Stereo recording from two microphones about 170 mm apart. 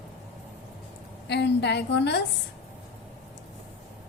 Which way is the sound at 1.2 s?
85° left.